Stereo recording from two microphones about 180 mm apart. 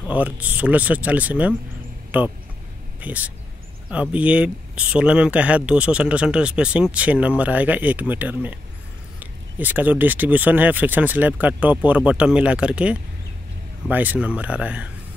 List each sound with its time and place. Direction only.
0.0 s speech: 10° right (ahead or behind)